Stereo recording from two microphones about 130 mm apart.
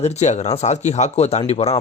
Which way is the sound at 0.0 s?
60° left (ahead or behind).